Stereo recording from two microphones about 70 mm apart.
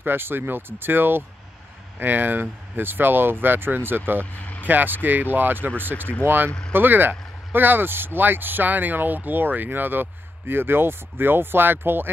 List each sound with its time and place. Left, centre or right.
0.0 s speech: right